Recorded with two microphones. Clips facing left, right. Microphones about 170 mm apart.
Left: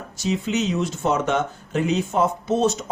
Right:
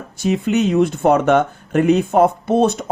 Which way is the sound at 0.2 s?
55° right (ahead or behind).